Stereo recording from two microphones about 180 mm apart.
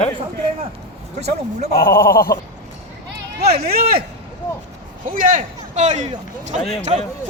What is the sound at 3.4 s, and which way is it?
Speech, 60° right (ahead or behind).